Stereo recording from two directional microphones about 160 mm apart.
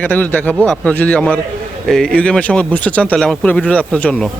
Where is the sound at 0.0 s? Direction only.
10° left (ahead or behind).